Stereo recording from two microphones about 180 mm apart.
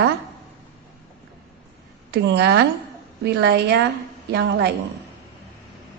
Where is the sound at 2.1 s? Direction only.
70° right (ahead or behind).